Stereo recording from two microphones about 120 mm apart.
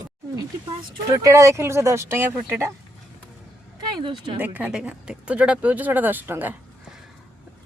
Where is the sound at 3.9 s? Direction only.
40° right (ahead or behind).